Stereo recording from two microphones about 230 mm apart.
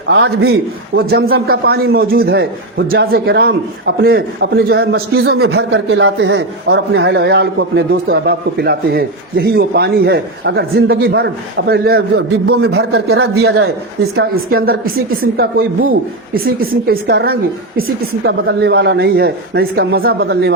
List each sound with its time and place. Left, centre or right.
0.1 s a man's voice: right